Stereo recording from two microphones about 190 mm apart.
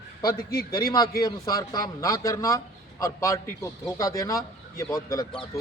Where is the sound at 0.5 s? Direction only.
20° left (ahead or behind).